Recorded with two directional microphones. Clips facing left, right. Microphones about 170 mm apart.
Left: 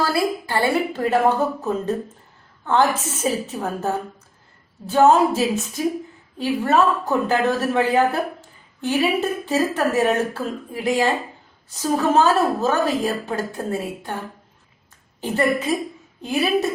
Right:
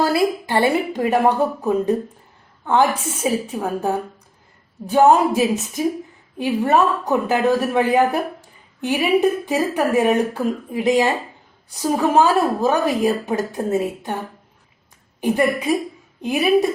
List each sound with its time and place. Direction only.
0.0 s a woman's voice: 20° right (ahead or behind)
15.2 s a woman's voice: 15° right (ahead or behind)